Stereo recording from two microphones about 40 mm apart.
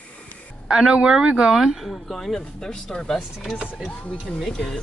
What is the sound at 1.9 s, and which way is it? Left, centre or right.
Speech, centre.